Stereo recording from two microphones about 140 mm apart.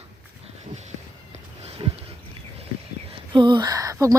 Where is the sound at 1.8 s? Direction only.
40° right (ahead or behind).